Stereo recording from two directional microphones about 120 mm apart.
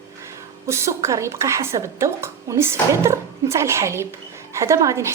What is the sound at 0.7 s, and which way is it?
A woman's voice, 25° right (ahead or behind).